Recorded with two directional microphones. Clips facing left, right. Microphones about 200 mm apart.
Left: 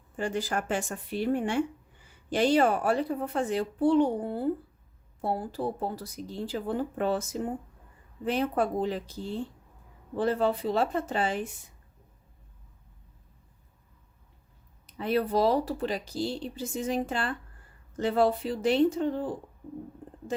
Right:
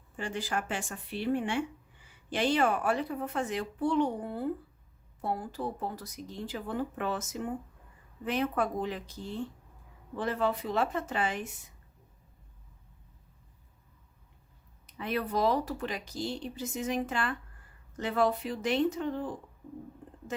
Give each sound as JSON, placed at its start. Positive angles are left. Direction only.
{"t": 0.2, "sound": "speech", "side_deg": 40}
{"t": 14.8, "sound": "speech", "side_deg": 35}